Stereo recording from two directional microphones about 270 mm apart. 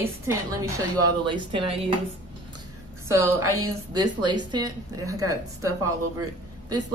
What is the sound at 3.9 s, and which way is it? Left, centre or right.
Speech, centre.